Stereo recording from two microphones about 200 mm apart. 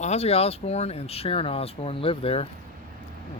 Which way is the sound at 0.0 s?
30° left (ahead or behind).